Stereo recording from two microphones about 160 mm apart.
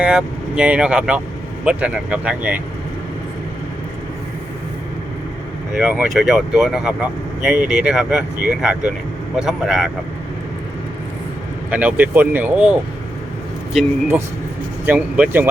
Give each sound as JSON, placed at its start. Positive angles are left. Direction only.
{"t": 0.0, "sound": "speech", "side_deg": -5}
{"t": 5.7, "sound": "speech", "side_deg": -10}
{"t": 11.7, "sound": "speech", "side_deg": -10}
{"t": 14.8, "sound": "speech", "side_deg": -10}